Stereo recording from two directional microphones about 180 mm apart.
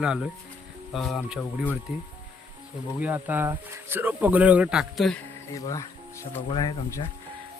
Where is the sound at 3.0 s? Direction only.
10° right (ahead or behind).